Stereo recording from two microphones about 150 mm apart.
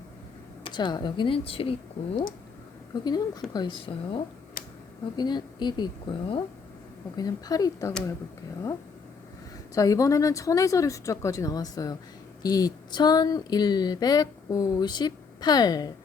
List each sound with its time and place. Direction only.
0.6 s speech: 30° left (ahead or behind)
2.9 s speech: 30° left (ahead or behind)
4.6 s a sound: 70° left (ahead or behind)
5.1 s speech: 30° left (ahead or behind)
9.7 s speech: 25° left (ahead or behind)